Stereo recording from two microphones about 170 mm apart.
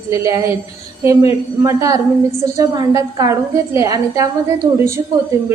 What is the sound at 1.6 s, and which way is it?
A woman's voice, 20° right (ahead or behind).